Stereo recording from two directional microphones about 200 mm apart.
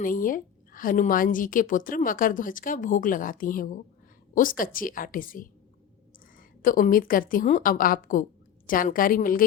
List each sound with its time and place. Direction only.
0.0 s a woman's voice: 45° left (ahead or behind)
6.6 s a woman's voice: 45° left (ahead or behind)